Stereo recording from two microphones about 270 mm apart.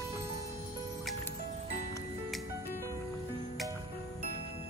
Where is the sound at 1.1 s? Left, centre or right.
Centre.